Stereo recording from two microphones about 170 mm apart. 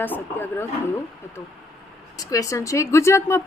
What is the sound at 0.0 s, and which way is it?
Speech, 10° left (ahead or behind).